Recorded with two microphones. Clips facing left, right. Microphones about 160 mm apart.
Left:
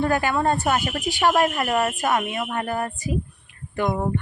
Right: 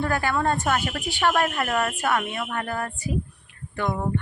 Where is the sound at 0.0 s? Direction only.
15° left (ahead or behind).